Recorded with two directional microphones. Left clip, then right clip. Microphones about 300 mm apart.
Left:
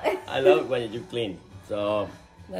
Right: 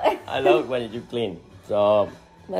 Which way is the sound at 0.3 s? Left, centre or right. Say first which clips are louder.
Left 2 dB; centre.